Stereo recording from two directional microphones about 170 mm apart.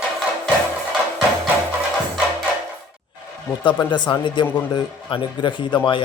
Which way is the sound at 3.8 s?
25° left (ahead or behind).